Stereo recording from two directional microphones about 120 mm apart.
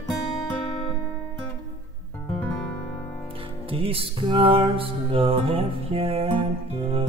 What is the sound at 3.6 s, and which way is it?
Music, 50° right (ahead or behind).